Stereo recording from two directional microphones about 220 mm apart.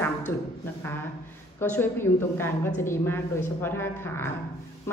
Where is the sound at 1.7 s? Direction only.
10° left (ahead or behind).